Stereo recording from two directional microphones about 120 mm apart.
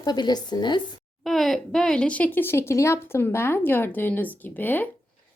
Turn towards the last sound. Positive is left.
turn(degrees=15)  # may be behind; listen again after turning